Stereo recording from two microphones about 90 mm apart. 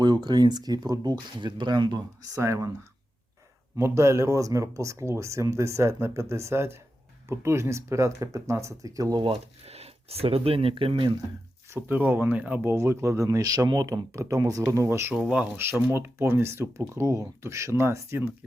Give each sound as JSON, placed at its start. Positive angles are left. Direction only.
{"t": 0.0, "sound": "speech", "side_deg": -55}
{"t": 2.4, "sound": "speech", "side_deg": -35}
{"t": 3.8, "sound": "speech", "side_deg": -30}
{"t": 10.2, "sound": "speech", "side_deg": -90}
{"t": 11.7, "sound": "speech", "side_deg": -20}
{"t": 12.7, "sound": "speech", "side_deg": -30}
{"t": 15.1, "sound": "speech", "side_deg": -15}
{"t": 15.9, "sound": "speech", "side_deg": -25}